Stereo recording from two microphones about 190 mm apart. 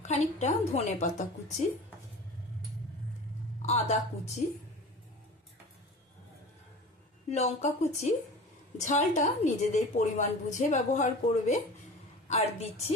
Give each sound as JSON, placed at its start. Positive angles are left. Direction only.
{"t": 0.0, "sound": "a woman's voice", "side_deg": 35}
{"t": 3.6, "sound": "a woman's voice", "side_deg": 35}
{"t": 7.3, "sound": "a woman's voice", "side_deg": 35}